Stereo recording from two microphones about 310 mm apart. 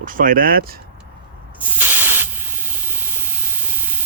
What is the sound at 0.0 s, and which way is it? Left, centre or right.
Speech, right.